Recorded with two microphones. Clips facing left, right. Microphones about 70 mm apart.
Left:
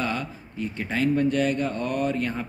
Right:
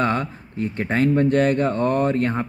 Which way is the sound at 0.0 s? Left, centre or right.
Right.